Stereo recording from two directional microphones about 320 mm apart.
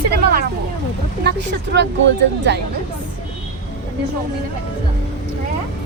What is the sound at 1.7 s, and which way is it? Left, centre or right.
Speech, right.